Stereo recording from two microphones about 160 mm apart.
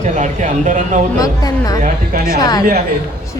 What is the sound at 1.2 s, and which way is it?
Speech, 20° left (ahead or behind).